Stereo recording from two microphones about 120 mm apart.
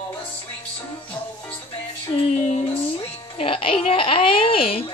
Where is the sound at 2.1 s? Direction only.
60° left (ahead or behind).